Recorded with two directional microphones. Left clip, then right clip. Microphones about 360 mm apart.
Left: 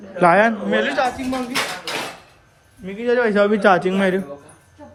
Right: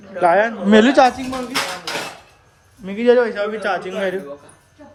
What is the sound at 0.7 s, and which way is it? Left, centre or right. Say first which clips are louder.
Speech: right 7 dB; centre.